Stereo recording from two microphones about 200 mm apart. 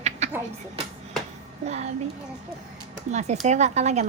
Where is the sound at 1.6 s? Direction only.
35° right (ahead or behind).